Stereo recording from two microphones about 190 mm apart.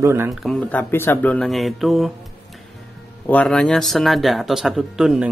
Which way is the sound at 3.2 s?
10° left (ahead or behind).